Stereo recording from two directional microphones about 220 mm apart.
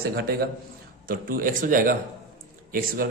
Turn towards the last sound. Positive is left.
turn(degrees=-40)  # may be behind; listen again after turning